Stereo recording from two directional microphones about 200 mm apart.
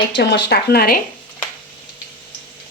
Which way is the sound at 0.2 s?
60° left (ahead or behind).